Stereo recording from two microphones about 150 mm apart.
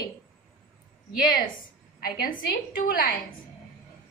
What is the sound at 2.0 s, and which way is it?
A woman's voice, 70° left (ahead or behind).